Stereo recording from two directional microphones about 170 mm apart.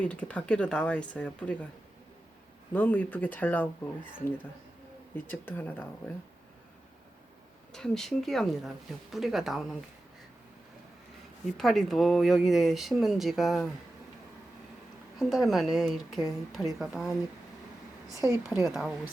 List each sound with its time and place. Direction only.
0.0 s speech: 5° left (ahead or behind)
2.7 s speech: 10° left (ahead or behind)
5.1 s speech: 10° left (ahead or behind)
7.7 s speech: 5° left (ahead or behind)
11.4 s speech: centre (ahead or behind)
15.2 s speech: centre (ahead or behind)
18.1 s a woman's voice: 20° right (ahead or behind)
18.6 s speech: centre (ahead or behind)